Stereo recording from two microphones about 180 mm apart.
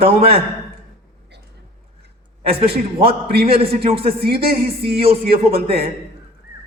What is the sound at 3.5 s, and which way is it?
Speech, 30° right (ahead or behind).